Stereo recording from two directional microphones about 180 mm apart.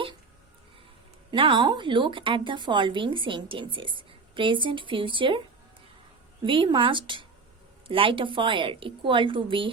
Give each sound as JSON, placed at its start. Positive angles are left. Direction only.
{"t": 1.3, "sound": "speech", "side_deg": -25}
{"t": 6.4, "sound": "speech", "side_deg": -30}